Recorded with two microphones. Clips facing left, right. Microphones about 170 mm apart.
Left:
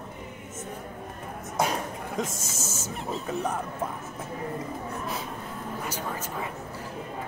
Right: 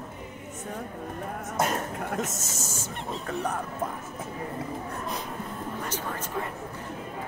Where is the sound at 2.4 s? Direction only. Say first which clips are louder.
Even; 40° right (ahead or behind).